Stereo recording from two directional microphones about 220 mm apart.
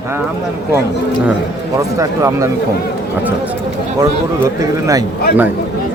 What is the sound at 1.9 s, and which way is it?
Speech, 15° right (ahead or behind).